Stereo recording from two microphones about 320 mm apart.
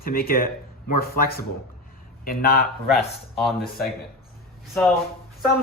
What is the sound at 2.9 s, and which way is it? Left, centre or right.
Speech, centre.